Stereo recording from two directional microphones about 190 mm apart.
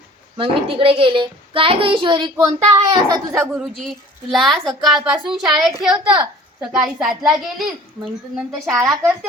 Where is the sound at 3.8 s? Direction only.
Centre (ahead or behind).